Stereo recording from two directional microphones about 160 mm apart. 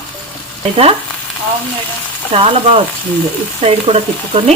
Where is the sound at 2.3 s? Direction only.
35° right (ahead or behind).